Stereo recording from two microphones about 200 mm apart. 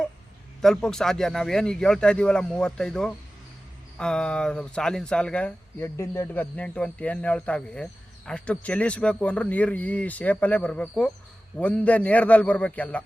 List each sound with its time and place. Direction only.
0.6 s a man's voice: 5° left (ahead or behind)